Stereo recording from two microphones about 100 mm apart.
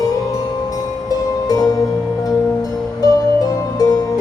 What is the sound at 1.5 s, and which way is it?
Music, 35° left (ahead or behind).